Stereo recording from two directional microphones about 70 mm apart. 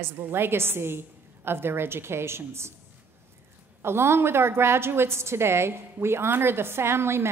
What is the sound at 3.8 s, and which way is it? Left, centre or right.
A woman's voice, right.